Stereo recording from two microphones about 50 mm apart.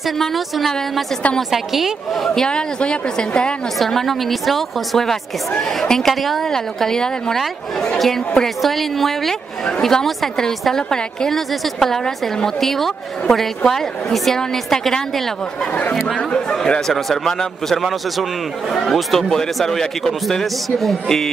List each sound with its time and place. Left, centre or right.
0.2 s a woman's voice: centre
2.2 s a woman's voice: centre
3.8 s a woman's voice: centre